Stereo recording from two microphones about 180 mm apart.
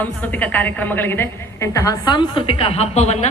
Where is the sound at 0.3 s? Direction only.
10° left (ahead or behind).